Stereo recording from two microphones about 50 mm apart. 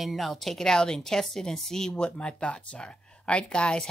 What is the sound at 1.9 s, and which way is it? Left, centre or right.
Speech, left.